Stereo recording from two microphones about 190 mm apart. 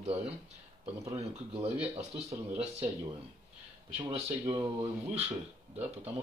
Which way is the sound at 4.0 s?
25° right (ahead or behind).